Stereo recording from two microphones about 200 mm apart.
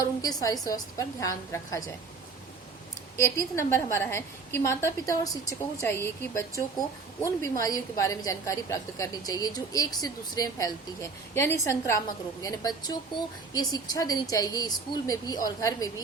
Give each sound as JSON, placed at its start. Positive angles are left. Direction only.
{"t": 0.0, "sound": "a woman's voice", "side_deg": 20}
{"t": 3.2, "sound": "a woman's voice", "side_deg": 15}
{"t": 7.6, "sound": "a woman's voice", "side_deg": 15}